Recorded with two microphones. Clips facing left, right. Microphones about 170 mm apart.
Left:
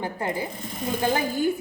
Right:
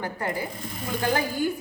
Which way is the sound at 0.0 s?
20° left (ahead or behind).